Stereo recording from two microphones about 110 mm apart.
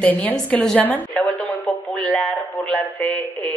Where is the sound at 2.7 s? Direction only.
10° left (ahead or behind).